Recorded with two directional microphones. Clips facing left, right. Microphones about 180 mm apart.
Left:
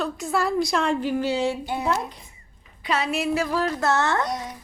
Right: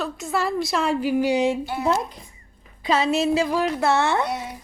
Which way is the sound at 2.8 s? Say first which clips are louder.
Right 4 dB; 25° right (ahead or behind).